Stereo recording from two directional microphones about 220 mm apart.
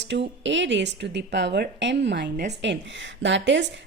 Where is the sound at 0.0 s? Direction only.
55° right (ahead or behind).